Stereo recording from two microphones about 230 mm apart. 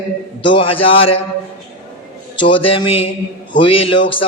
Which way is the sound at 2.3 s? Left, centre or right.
Left.